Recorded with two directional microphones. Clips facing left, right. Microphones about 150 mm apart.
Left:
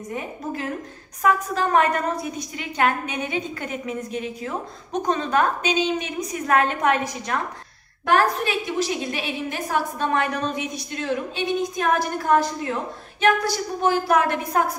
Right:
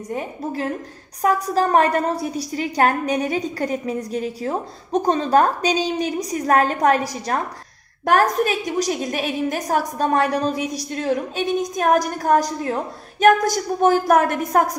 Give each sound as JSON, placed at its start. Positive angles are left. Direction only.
{"t": 1.2, "sound": "a woman's voice", "side_deg": -35}